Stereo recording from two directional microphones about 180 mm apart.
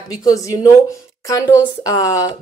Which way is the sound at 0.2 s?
20° left (ahead or behind).